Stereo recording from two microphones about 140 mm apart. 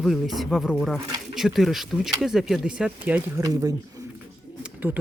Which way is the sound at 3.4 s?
25° right (ahead or behind).